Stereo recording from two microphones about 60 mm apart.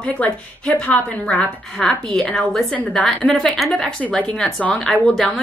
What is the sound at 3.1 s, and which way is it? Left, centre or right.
Speech, centre.